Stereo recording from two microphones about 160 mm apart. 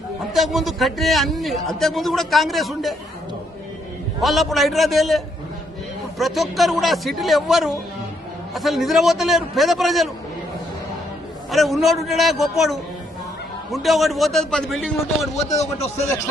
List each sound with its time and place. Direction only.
0.3 s a man's voice: centre (ahead or behind)
4.2 s a man's voice: centre (ahead or behind)
11.5 s a man's voice: centre (ahead or behind)
15.4 s a man's voice: 45° left (ahead or behind)